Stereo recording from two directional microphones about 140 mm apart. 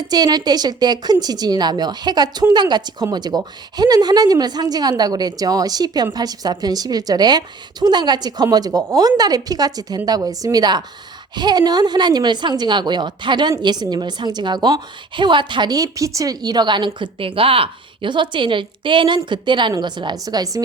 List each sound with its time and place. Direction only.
0.1 s a woman's voice: 30° right (ahead or behind)